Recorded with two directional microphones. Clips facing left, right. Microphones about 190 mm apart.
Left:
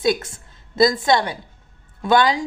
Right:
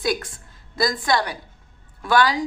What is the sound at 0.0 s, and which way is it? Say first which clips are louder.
A woman's voice: left 4 dB; 25° left (ahead or behind).